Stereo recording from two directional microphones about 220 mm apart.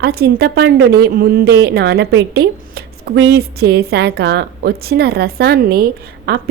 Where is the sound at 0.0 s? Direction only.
45° right (ahead or behind).